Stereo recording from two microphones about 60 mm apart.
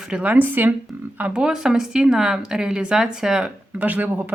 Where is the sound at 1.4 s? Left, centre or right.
Centre.